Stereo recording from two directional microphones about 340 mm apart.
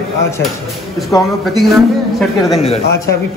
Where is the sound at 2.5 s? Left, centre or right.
Centre.